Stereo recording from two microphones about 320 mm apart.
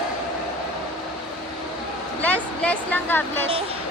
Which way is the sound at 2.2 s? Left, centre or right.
Centre.